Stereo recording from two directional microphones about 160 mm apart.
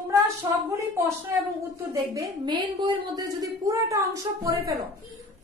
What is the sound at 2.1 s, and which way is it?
A woman's voice, 25° right (ahead or behind).